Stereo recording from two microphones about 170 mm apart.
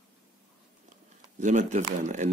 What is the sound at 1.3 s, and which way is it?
Speech, 45° right (ahead or behind).